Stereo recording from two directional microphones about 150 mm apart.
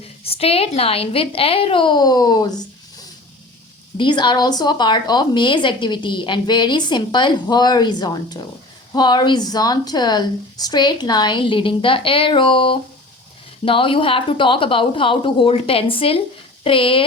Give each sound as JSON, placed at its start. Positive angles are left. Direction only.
{"t": 0.0, "sound": "a woman's voice", "side_deg": 40}
{"t": 3.9, "sound": "a woman's voice", "side_deg": 30}